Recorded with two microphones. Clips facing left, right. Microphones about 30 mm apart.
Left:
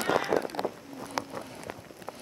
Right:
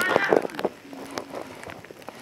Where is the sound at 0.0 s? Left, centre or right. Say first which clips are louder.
Right 6 dB; right.